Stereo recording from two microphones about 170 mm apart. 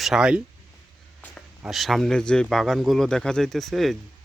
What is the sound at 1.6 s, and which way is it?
Speech, centre (ahead or behind).